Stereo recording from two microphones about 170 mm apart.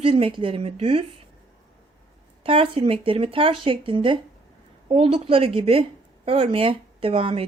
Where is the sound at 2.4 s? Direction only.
30° right (ahead or behind).